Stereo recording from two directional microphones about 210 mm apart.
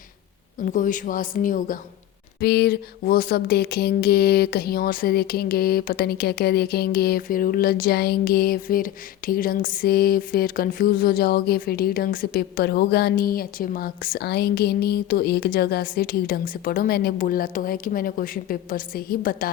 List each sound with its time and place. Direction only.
0.6 s a woman's voice: 40° left (ahead or behind)